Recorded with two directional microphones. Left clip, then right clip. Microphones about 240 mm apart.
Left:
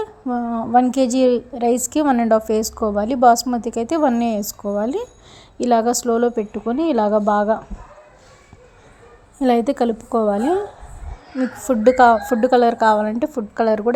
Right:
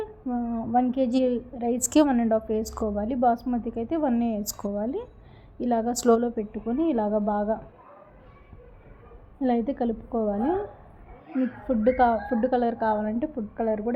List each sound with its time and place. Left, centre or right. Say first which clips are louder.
0.0 s a woman's voice: left 8 dB; left
1.8 s a woman's voice: even; centre
2.0 s a woman's voice: left 8 dB; left
9.4 s a woman's voice: left 9 dB; left
11.7 s a woman's voice: left 9 dB; left